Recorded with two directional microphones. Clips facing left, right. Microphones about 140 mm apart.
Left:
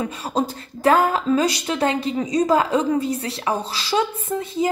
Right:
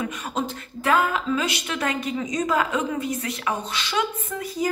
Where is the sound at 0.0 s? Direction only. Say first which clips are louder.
Left 4 dB; 35° left (ahead or behind).